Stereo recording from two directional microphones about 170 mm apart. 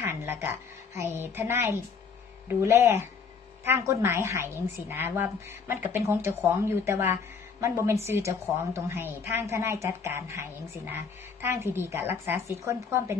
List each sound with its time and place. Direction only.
0.0 s a woman's voice: 15° right (ahead or behind)